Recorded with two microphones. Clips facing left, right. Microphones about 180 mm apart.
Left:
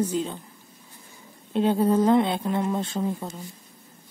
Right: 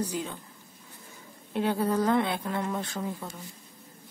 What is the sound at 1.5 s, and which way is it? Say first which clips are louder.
Speech: left 6 dB; 20° left (ahead or behind).